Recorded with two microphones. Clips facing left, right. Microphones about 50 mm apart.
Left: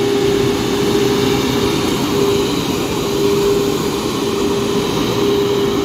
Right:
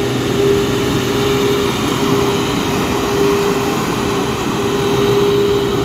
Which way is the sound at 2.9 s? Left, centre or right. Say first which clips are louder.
Right 1 dB; right.